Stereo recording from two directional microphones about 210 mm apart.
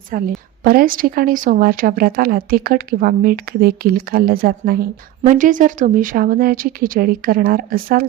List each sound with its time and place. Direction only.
0.1 s a woman's voice: 40° right (ahead or behind)